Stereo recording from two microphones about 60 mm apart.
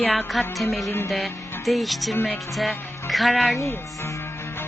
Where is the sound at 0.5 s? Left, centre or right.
Centre.